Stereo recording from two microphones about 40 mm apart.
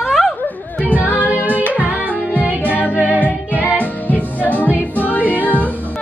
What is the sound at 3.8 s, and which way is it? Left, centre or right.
Music, left.